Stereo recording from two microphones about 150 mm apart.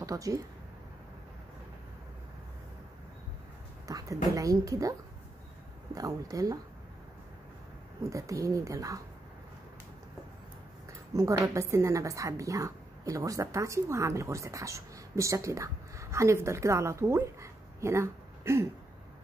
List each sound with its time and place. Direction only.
0.0 s speech: 20° right (ahead or behind)
3.8 s a woman's voice: 20° right (ahead or behind)
5.9 s a woman's voice: 25° right (ahead or behind)
8.1 s a woman's voice: 20° right (ahead or behind)
10.9 s a woman's voice: 20° right (ahead or behind)